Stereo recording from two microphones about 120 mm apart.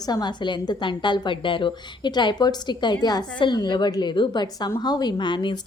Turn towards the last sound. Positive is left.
turn(degrees=40)  # may be behind; listen again after turning